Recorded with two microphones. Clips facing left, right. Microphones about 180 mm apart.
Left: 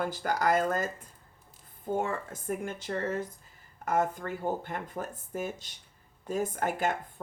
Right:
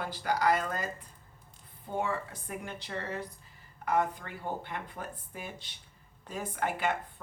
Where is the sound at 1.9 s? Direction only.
45° left (ahead or behind).